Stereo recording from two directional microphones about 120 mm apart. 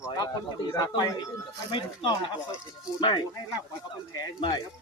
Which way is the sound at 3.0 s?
40° left (ahead or behind).